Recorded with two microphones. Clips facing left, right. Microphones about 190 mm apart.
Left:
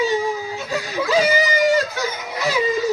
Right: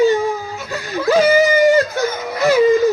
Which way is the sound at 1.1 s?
55° right (ahead or behind).